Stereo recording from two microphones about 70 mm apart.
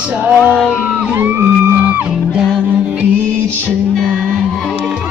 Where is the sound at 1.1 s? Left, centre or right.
Right.